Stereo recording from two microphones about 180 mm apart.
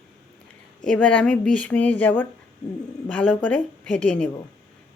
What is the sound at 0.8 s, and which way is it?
A woman's voice, 5° left (ahead or behind).